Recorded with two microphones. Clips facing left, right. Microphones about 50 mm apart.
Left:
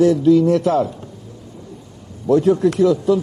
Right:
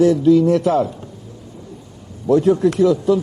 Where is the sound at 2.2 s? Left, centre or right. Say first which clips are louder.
Even; centre.